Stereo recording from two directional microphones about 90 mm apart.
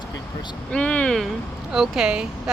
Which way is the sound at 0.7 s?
15° left (ahead or behind).